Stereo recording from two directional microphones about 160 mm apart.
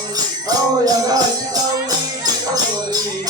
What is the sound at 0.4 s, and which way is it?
Music, 25° right (ahead or behind).